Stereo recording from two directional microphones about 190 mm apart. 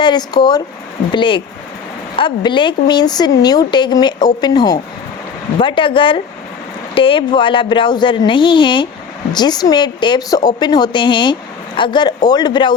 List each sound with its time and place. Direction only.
0.0 s speech: 20° left (ahead or behind)